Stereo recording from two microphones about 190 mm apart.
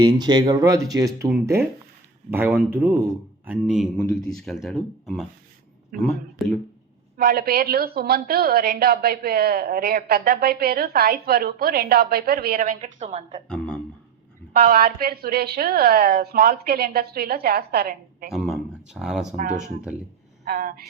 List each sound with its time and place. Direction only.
0.0 s speech: 20° right (ahead or behind); by 5.2 s centre (ahead or behind)
7.2 s a woman's voice: 50° right (ahead or behind)
12.8 s a woman's voice: 35° right (ahead or behind)
14.7 s a woman's voice: 50° right (ahead or behind)
18.3 s speech: centre (ahead or behind)
19.4 s a woman's voice: 45° right (ahead or behind)